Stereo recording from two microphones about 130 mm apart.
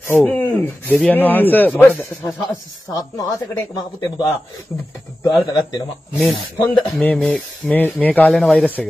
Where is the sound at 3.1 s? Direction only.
20° left (ahead or behind).